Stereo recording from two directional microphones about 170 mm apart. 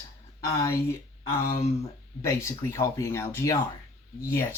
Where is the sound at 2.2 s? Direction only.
15° left (ahead or behind).